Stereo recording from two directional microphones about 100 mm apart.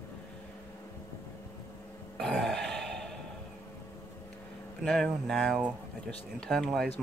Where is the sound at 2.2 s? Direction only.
Centre (ahead or behind).